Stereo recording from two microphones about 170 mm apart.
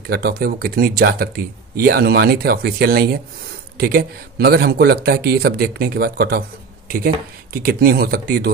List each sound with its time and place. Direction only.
0.1 s speech: 65° right (ahead or behind)